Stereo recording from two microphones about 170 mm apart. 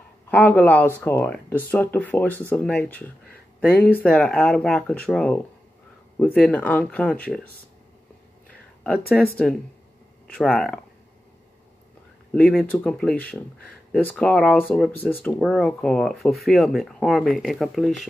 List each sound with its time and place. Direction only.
0.3 s speech: 10° left (ahead or behind)
8.5 s a sound: 5° left (ahead or behind)
9.5 s speech: 5° left (ahead or behind)
12.4 s speech: 5° left (ahead or behind)